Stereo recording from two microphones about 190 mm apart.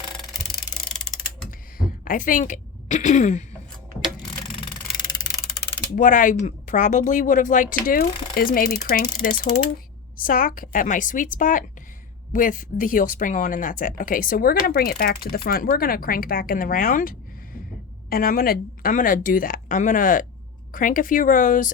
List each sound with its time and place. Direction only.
1.1 s mechanisms: centre (ahead or behind)
2.0 s a woman's voice: 45° left (ahead or behind)
4.5 s a sound: 25° left (ahead or behind)
6.0 s speech: 45° left (ahead or behind)